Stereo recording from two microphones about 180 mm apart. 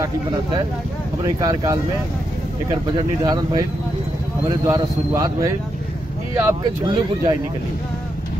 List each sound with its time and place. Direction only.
0.0 s a man's voice: 20° right (ahead or behind)
3.3 s a man's voice: 20° right (ahead or behind)